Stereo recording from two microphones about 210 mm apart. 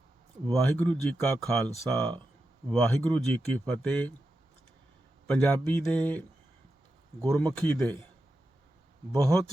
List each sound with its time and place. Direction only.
0.5 s speech: 5° left (ahead or behind)
5.2 s speech: 5° left (ahead or behind)
9.1 s speech: 5° left (ahead or behind)